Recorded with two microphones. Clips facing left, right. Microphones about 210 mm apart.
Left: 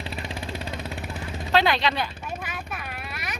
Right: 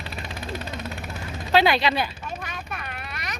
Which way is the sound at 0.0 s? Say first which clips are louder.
Left 2 dB; 30° left (ahead or behind).